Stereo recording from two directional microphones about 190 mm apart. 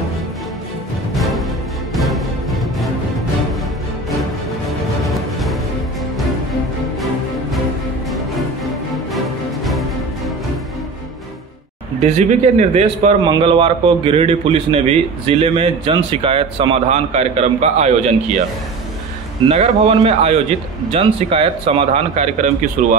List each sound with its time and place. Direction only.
1.1 s music: centre (ahead or behind)
4.6 s music: centre (ahead or behind)
8.6 s music: centre (ahead or behind)
12.0 s a man's voice: 35° right (ahead or behind)
19.4 s a man's voice: 35° right (ahead or behind)